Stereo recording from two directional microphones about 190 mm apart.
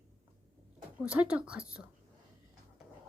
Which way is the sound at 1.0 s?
5° right (ahead or behind).